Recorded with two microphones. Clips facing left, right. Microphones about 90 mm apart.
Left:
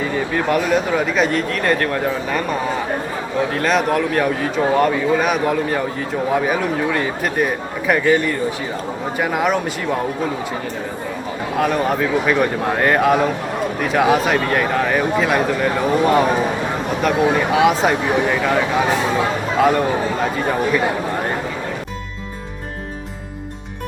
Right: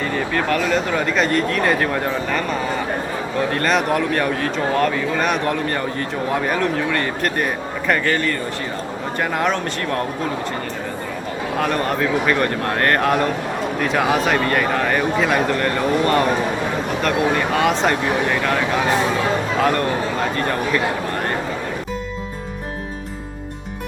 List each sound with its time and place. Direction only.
0.0 s speech: 10° left (ahead or behind)
11.5 s speech: centre (ahead or behind)